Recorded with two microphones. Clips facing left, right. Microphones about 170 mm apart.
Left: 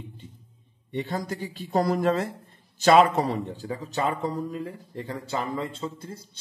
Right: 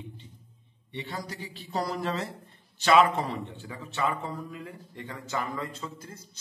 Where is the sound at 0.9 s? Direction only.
45° left (ahead or behind).